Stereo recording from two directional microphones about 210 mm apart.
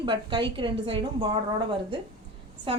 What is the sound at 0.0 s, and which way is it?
A woman's voice, 20° right (ahead or behind).